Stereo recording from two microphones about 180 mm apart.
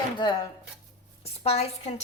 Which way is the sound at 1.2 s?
35° left (ahead or behind).